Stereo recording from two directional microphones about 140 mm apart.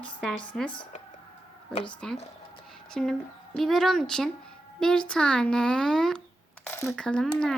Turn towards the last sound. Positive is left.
turn(degrees=5)  # may be behind; listen again after turning